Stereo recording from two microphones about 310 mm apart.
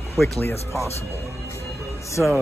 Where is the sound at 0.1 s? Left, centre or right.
Centre.